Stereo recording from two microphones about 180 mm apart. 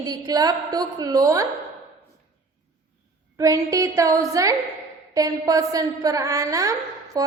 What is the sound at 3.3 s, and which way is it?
A woman's voice, 20° right (ahead or behind).